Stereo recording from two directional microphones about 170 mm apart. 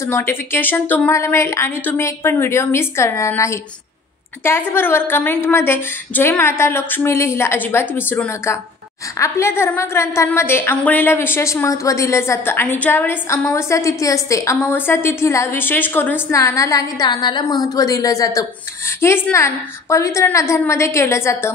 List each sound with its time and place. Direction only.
0.0 s a woman's voice: 15° left (ahead or behind)